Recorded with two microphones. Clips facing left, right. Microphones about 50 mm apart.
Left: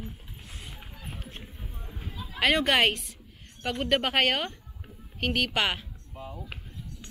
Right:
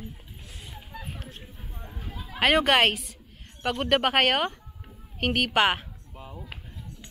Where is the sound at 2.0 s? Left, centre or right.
Right.